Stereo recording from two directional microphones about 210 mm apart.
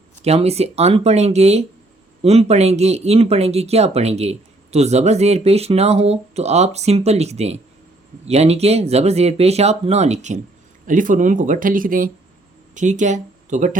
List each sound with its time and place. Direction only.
0.2 s speech: 30° right (ahead or behind)